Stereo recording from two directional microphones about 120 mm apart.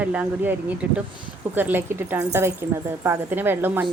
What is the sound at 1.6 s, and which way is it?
Speech, 15° right (ahead or behind).